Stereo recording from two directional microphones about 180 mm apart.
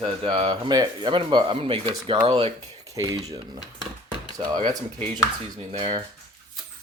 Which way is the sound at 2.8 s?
20° right (ahead or behind).